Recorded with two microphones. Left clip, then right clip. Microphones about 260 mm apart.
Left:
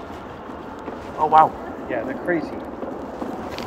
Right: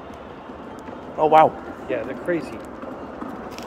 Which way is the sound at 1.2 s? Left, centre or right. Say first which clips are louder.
Even; right.